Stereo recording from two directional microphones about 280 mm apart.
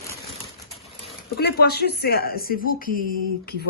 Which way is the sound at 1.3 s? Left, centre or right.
Left.